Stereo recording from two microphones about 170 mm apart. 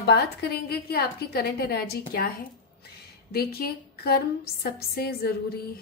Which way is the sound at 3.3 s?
65° left (ahead or behind).